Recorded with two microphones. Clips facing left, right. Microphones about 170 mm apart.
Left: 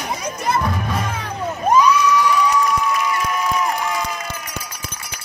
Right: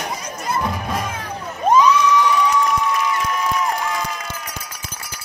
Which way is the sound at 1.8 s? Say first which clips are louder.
Even; 25° right (ahead or behind).